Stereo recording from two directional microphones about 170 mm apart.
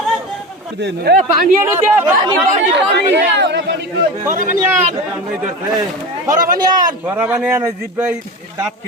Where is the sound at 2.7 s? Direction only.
90° right.